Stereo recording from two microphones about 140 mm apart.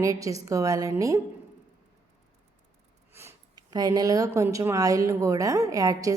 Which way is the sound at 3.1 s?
20° right (ahead or behind).